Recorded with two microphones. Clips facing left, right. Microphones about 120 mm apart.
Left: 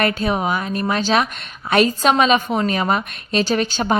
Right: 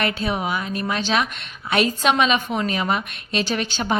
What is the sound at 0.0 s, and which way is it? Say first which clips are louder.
A woman's voice: left 4 dB; 45° left (ahead or behind).